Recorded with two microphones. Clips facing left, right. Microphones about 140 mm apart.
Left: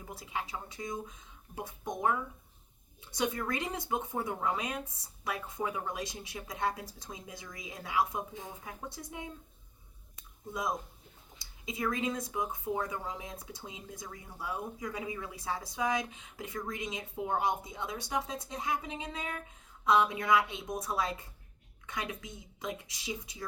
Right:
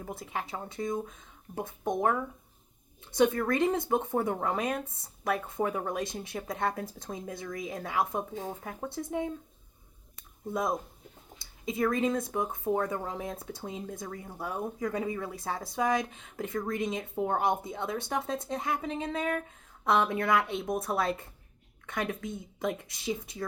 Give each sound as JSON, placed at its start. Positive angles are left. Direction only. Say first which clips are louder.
{"t": 0.0, "sound": "speech", "louder": "right 3 dB", "side_deg": -55}
{"t": 11.6, "sound": "speech", "louder": "right 6 dB", "side_deg": -55}